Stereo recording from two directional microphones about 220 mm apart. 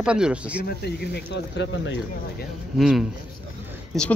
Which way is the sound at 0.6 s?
45° left (ahead or behind).